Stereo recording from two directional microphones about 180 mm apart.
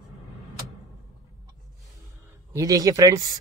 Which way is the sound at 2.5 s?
20° right (ahead or behind).